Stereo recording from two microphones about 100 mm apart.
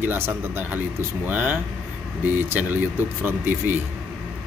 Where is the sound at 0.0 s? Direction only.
20° right (ahead or behind).